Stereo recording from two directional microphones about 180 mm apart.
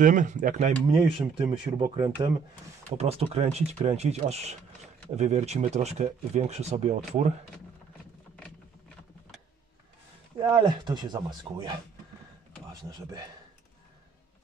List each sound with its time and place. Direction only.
0.0 s speech: 45° right (ahead or behind)
0.8 s speech: 30° right (ahead or behind)
3.0 s speech: 35° right (ahead or behind)
10.4 s speech: 25° right (ahead or behind)